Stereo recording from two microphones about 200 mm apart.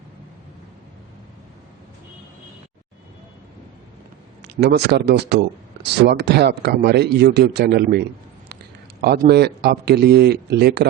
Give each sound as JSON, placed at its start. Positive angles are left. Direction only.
{"t": 4.4, "sound": "a man's voice", "side_deg": -55}